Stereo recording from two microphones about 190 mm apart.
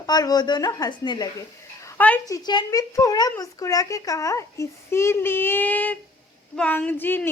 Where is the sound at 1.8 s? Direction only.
10° left (ahead or behind).